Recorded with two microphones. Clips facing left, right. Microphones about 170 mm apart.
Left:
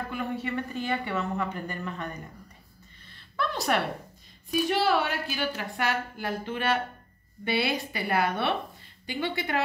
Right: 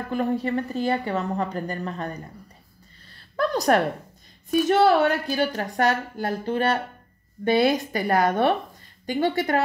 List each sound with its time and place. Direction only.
0.1 s a woman's voice: 40° right (ahead or behind)
3.1 s a sound: 40° right (ahead or behind)
4.5 s a woman's voice: 45° right (ahead or behind)